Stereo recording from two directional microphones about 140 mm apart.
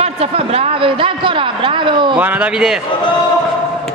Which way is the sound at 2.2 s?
10° right (ahead or behind).